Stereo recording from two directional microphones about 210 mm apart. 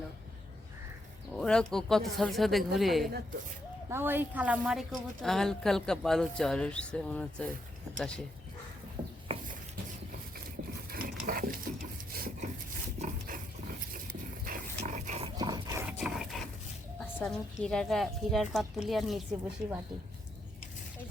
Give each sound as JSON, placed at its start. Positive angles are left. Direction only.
{"t": 1.3, "sound": "a woman's voice", "side_deg": 5}
{"t": 3.8, "sound": "a woman's voice", "side_deg": -10}
{"t": 9.0, "sound": "a sound", "side_deg": -20}
{"t": 11.2, "sound": "stir", "side_deg": -40}
{"t": 13.0, "sound": "pig", "side_deg": -40}
{"t": 14.4, "sound": "pig", "side_deg": -40}
{"t": 15.4, "sound": "dog", "side_deg": -20}
{"t": 17.0, "sound": "a woman's voice", "side_deg": 5}